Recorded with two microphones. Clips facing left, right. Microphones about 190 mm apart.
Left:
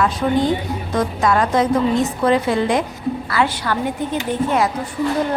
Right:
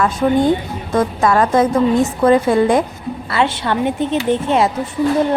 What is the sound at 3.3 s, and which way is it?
A woman's voice, 25° right (ahead or behind).